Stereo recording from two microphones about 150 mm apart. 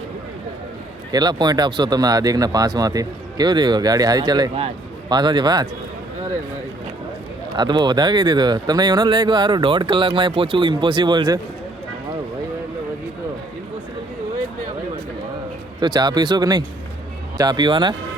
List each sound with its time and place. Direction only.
1.1 s speech: 30° right (ahead or behind)
7.5 s speech: 30° right (ahead or behind)
15.8 s speech: 30° right (ahead or behind)